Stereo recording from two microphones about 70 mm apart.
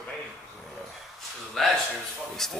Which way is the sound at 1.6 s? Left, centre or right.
Centre.